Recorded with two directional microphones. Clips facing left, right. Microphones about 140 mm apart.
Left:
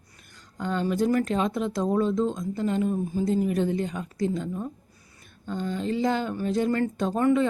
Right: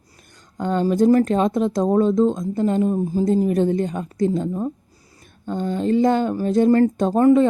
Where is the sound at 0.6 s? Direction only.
45° right (ahead or behind).